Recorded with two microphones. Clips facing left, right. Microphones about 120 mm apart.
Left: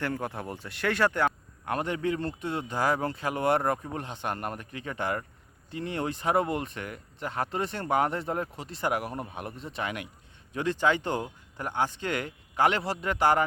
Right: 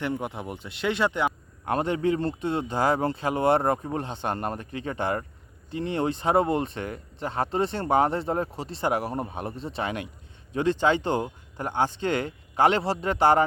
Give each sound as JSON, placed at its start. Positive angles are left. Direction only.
{"t": 0.0, "sound": "a man's voice", "side_deg": -20}